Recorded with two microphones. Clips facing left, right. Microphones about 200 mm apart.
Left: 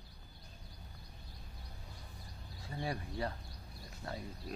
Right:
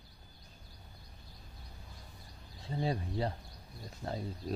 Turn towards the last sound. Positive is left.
turn(degrees=-25)  # may be behind; listen again after turning